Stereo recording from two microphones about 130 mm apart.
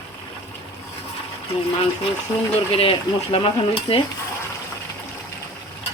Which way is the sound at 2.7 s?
45° left (ahead or behind).